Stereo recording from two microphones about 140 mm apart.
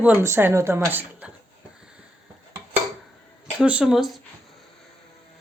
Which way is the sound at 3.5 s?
5° right (ahead or behind).